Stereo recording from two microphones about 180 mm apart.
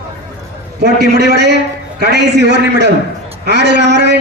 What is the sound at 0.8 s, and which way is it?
A man's voice, 65° right (ahead or behind).